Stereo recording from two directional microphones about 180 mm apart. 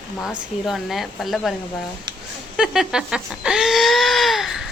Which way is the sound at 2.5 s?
5° right (ahead or behind).